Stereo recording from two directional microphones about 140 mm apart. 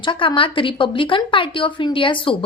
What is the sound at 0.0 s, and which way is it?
A woman's voice, 35° left (ahead or behind).